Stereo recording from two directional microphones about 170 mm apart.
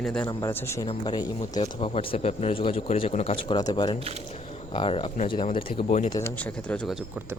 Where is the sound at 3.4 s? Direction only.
25° left (ahead or behind).